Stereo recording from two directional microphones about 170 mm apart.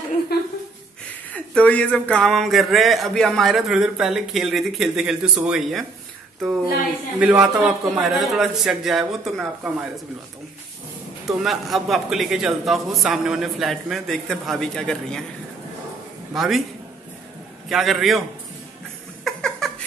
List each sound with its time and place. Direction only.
0.3 s a sound: 70° left (ahead or behind)
1.3 s speech: 10° left (ahead or behind)
7.2 s speech: 5° right (ahead or behind)
11.3 s speech: centre (ahead or behind)
16.3 s speech: centre (ahead or behind)
17.6 s speech: centre (ahead or behind)
19.2 s a sound: centre (ahead or behind)